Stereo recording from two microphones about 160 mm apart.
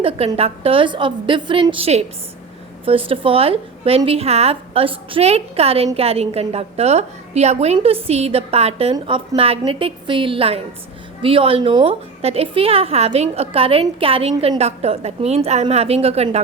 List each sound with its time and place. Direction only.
0.3 s a woman's voice: 35° right (ahead or behind)